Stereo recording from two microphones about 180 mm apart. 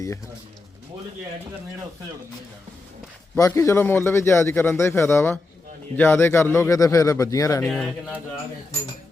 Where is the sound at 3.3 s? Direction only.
15° left (ahead or behind).